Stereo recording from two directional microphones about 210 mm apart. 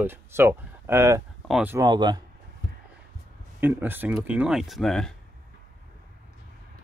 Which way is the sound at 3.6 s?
10° right (ahead or behind).